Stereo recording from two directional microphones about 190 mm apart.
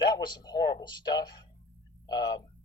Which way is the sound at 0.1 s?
20° left (ahead or behind).